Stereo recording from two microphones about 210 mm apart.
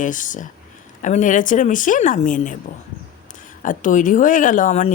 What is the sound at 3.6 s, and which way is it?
A woman's voice, 40° left (ahead or behind).